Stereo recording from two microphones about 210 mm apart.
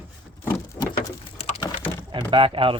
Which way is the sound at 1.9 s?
25° right (ahead or behind).